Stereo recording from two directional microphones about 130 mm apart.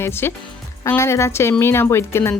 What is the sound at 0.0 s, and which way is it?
A woman's voice, 20° left (ahead or behind).